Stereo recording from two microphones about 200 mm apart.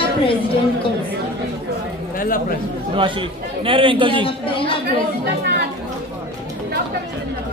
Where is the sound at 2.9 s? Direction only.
25° right (ahead or behind).